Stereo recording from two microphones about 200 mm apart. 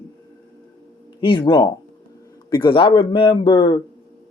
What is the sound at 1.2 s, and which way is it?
A man's voice, 25° left (ahead or behind).